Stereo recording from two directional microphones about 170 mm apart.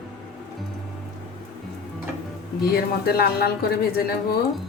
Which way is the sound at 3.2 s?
65° left (ahead or behind).